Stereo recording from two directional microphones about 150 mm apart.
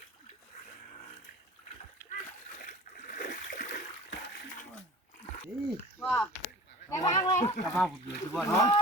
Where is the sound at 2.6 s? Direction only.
60° left (ahead or behind).